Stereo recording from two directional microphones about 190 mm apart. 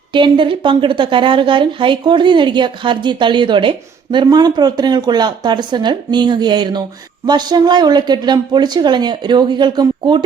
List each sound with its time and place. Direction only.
0.1 s a woman's voice: 25° right (ahead or behind)